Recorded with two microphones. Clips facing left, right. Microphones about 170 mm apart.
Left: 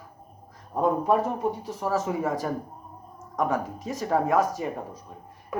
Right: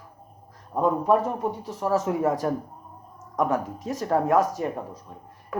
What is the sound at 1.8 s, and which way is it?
Speech, 5° left (ahead or behind).